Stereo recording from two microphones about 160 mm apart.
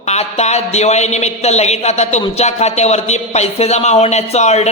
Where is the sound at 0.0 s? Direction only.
45° left (ahead or behind).